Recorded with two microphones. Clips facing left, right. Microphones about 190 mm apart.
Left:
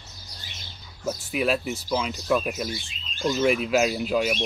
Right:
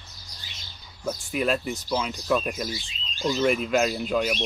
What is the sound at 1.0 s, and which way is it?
Speech, 5° left (ahead or behind).